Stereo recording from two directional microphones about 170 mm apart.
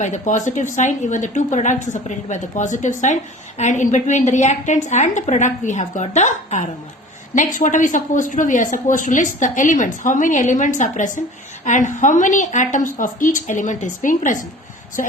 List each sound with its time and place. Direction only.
0.0 s a woman's voice: 45° left (ahead or behind)